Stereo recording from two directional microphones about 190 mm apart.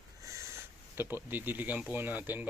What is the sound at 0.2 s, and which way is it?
Speech, 15° right (ahead or behind).